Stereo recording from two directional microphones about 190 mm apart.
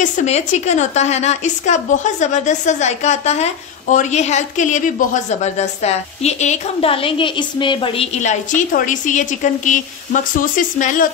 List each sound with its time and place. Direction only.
0.0 s a woman's voice: 35° left (ahead or behind)
8.2 s a woman's voice: 40° left (ahead or behind)